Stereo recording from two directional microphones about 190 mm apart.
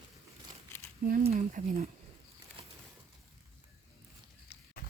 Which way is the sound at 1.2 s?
35° right (ahead or behind).